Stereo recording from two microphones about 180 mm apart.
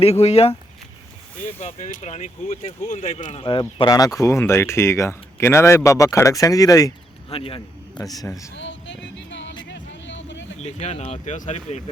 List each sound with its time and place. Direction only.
0.0 s speech: 35° left (ahead or behind)
1.6 s speech: 40° left (ahead or behind)
3.4 s speech: 25° left (ahead or behind)
7.3 s speech: 30° left (ahead or behind)
8.1 s speech: 20° left (ahead or behind)
8.5 s a sound: 90° left
9.1 s music: 90° left
9.6 s vehicle: 90° left
10.6 s speech: 35° left (ahead or behind)